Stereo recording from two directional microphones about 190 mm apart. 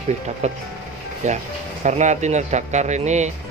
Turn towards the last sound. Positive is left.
turn(degrees=-35)  # may be behind; listen again after turning